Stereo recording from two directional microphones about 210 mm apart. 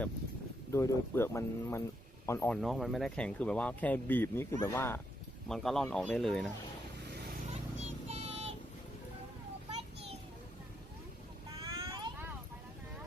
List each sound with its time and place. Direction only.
0.7 s speech: 15° left (ahead or behind)
2.6 s speech: centre (ahead or behind)
5.5 s speech: centre (ahead or behind)
7.8 s child singing: 30° right (ahead or behind)
11.7 s vehicle: 20° right (ahead or behind)